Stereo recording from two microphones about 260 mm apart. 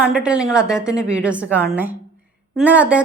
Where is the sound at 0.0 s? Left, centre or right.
Centre.